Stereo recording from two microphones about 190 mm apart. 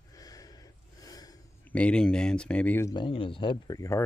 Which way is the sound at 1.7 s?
5° left (ahead or behind).